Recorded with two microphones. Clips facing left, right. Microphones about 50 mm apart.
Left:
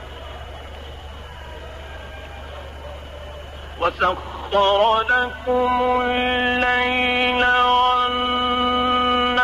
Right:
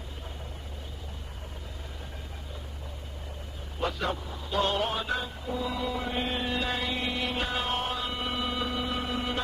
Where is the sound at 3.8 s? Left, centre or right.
Left.